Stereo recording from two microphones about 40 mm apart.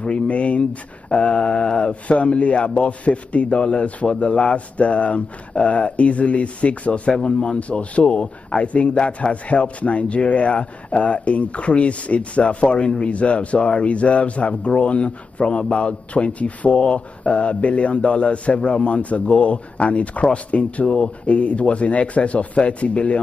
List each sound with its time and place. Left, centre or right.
0.0 s speech: left
7.1 s speech: left